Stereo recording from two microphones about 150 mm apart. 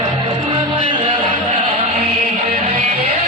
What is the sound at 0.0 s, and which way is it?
Music, 30° right (ahead or behind).